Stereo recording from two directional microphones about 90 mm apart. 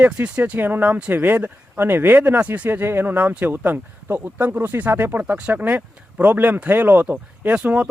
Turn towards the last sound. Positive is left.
turn(degrees=-15)  # may be behind; listen again after turning